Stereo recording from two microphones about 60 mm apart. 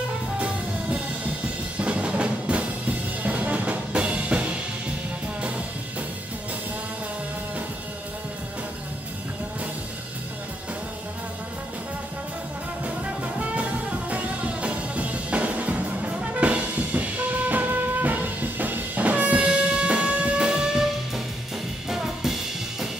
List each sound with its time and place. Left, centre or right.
1.8 s music: centre
12.8 s music: right
21.8 s music: centre